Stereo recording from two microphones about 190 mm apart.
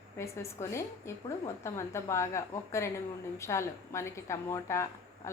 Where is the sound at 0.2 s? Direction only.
15° left (ahead or behind).